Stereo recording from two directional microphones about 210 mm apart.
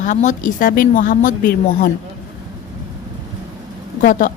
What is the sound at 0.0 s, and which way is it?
A woman's voice, 35° left (ahead or behind).